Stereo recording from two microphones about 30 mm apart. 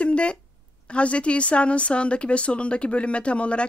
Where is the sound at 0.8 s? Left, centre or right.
Left.